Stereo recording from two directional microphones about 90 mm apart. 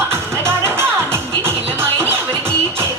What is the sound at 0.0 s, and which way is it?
Music, 30° right (ahead or behind).